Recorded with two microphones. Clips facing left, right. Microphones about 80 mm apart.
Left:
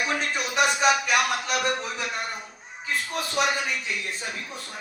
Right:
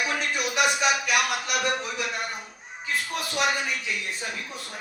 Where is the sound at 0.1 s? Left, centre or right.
Left.